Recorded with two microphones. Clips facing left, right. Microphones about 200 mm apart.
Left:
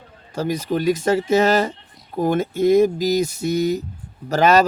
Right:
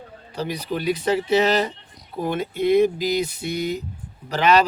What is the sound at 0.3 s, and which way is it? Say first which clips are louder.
Speech: left 5 dB; 45° left (ahead or behind).